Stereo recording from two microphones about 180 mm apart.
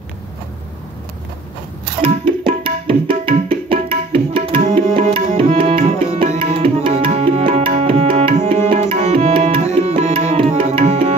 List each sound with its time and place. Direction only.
2.0 s tabla: 30° right (ahead or behind)
4.9 s music: 50° right (ahead or behind)
5.4 s tabla: 35° right (ahead or behind)